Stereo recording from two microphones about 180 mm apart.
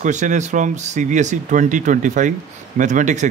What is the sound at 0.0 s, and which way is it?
A man's voice, 45° right (ahead or behind).